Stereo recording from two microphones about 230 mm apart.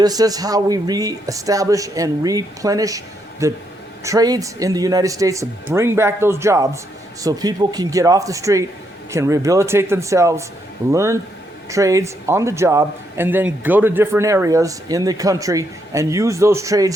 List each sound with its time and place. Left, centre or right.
0.0 s a man's voice: centre